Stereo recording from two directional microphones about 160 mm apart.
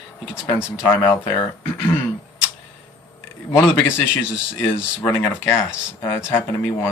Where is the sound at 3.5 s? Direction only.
15° left (ahead or behind).